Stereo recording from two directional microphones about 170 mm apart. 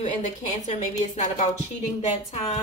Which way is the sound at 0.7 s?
45° left (ahead or behind).